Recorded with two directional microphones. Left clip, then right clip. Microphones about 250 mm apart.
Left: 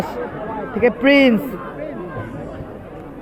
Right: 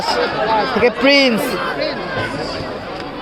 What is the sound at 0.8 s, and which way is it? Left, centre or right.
Speech, centre.